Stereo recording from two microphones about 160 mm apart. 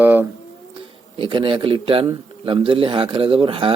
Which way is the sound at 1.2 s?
35° right (ahead or behind).